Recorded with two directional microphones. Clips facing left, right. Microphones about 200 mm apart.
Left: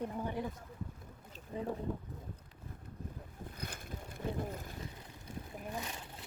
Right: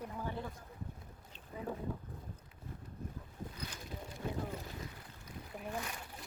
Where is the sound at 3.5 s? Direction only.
55° left (ahead or behind).